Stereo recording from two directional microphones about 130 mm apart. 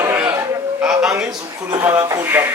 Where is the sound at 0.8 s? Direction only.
5° right (ahead or behind).